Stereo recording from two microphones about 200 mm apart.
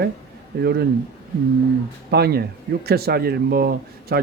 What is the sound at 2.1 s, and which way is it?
Speech, 50° right (ahead or behind).